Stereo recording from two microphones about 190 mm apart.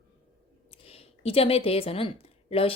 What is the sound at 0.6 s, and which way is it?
Speech, 30° left (ahead or behind).